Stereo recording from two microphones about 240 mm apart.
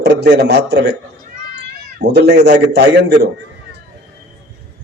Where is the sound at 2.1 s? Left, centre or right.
Right.